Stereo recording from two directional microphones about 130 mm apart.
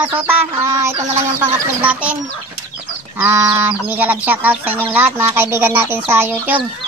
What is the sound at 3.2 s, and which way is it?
Speech, 20° right (ahead or behind).